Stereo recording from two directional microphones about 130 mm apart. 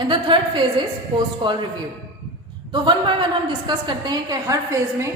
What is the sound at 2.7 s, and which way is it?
A woman's voice, 40° right (ahead or behind).